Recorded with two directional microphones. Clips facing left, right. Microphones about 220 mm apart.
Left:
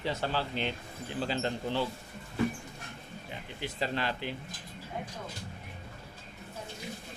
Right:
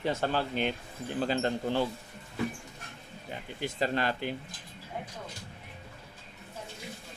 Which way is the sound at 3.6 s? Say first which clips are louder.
Right 3 dB; 45° right (ahead or behind).